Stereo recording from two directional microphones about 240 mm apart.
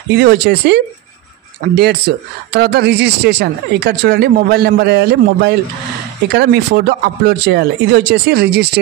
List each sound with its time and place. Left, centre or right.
0.1 s speech: right
1.8 s speech: right